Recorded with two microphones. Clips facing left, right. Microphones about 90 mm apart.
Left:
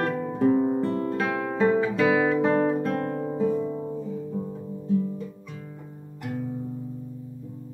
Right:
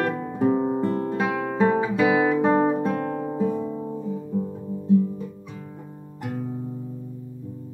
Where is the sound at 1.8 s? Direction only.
15° right (ahead or behind).